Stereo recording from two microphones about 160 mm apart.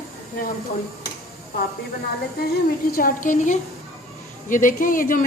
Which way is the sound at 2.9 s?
60° left (ahead or behind).